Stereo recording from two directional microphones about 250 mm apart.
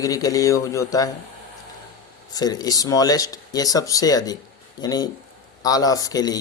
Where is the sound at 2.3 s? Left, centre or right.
Centre.